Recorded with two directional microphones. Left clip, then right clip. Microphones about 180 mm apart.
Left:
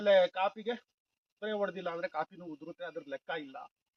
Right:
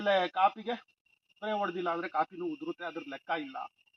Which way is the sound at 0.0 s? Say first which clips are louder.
Even; 35° left (ahead or behind).